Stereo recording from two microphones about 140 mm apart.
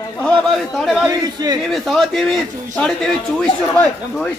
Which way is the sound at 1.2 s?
30° right (ahead or behind).